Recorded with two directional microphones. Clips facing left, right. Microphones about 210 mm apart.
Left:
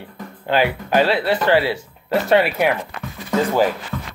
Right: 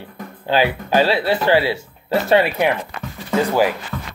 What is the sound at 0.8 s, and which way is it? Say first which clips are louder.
Speech: even; 30° right (ahead or behind).